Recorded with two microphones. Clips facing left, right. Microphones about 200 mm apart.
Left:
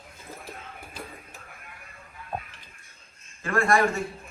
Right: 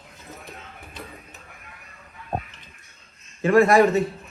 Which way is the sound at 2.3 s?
45° right (ahead or behind).